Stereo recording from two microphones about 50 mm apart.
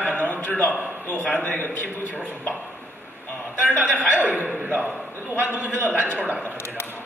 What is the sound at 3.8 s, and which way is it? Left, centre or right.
Speech, right.